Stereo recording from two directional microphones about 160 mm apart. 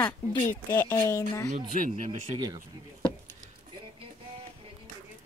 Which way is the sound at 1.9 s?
50° right (ahead or behind).